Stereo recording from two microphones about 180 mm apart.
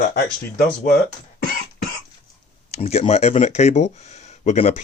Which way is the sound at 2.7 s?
35° left (ahead or behind).